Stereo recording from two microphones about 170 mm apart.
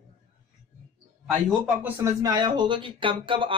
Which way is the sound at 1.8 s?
15° right (ahead or behind).